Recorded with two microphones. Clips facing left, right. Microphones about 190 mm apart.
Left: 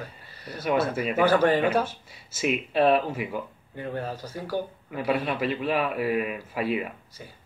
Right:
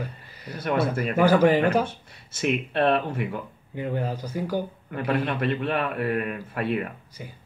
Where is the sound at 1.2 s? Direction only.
10° right (ahead or behind).